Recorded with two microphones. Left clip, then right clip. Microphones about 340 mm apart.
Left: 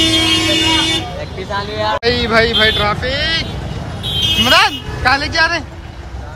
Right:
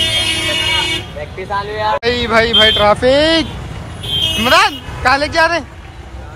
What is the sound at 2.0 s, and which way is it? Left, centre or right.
Speech, centre.